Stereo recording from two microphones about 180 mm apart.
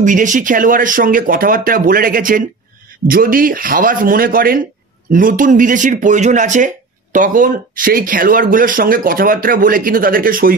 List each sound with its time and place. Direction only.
0.0 s speech: 45° right (ahead or behind)